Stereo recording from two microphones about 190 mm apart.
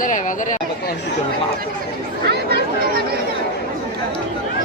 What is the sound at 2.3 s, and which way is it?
Chatter, 60° right (ahead or behind).